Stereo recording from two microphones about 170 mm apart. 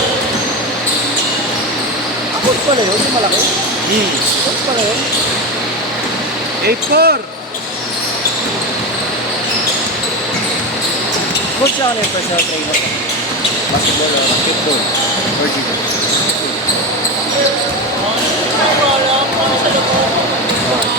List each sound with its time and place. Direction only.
6.7 s speech: 65° right (ahead or behind)